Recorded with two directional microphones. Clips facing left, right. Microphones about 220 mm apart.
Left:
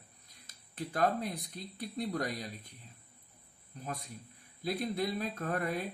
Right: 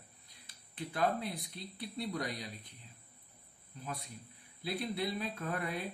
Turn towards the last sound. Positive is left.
turn(degrees=45)  # may be behind; listen again after turning